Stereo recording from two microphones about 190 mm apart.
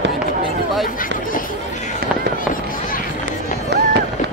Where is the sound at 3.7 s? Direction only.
65° right (ahead or behind).